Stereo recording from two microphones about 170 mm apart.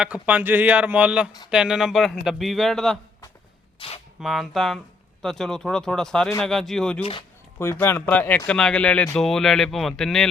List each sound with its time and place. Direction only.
0.0 s a man's voice: 10° right (ahead or behind)
3.8 s a sound: 35° left (ahead or behind)
4.2 s speech: centre (ahead or behind)
7.0 s speech: 30° left (ahead or behind)
7.6 s speech: 15° left (ahead or behind)